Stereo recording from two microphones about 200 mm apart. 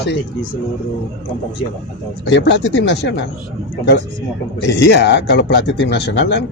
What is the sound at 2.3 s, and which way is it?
Speech, 60° left (ahead or behind).